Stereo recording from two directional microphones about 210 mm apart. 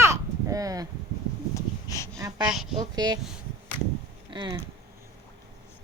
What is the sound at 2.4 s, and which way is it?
Speech, 5° right (ahead or behind).